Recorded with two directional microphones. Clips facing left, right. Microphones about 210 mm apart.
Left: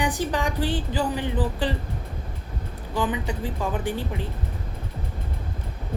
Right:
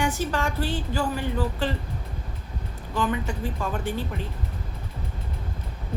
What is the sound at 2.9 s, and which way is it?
A woman's voice, 15° left (ahead or behind).